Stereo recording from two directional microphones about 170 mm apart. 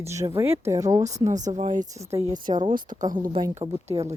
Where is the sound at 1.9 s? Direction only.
20° right (ahead or behind).